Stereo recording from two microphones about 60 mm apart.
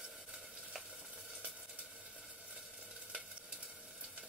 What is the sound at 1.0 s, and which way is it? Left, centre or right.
Sizzle, centre.